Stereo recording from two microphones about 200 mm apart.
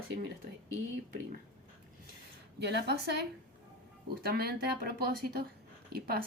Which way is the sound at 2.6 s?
55° right (ahead or behind).